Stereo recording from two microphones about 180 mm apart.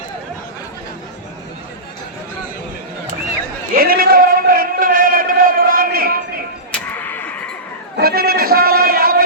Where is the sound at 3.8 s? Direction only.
55° right (ahead or behind).